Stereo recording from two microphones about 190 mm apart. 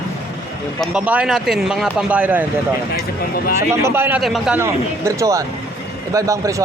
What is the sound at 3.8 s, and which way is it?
Speech, 10° right (ahead or behind).